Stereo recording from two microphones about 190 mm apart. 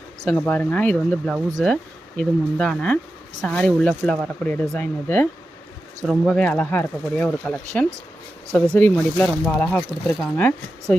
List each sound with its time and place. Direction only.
0.3 s speech: 10° left (ahead or behind)